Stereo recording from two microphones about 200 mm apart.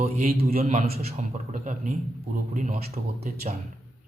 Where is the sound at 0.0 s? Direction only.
35° right (ahead or behind).